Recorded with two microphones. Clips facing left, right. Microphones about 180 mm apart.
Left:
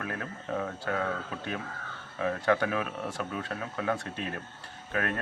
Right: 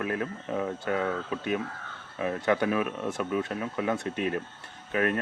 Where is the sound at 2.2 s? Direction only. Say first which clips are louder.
Right 1 dB; 20° right (ahead or behind).